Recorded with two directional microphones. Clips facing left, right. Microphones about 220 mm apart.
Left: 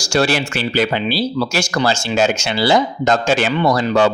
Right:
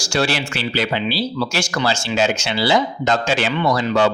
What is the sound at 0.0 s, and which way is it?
Speech, 45° left (ahead or behind).